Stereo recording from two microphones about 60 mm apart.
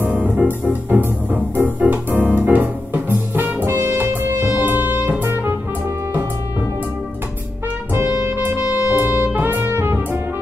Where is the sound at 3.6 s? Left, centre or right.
Right.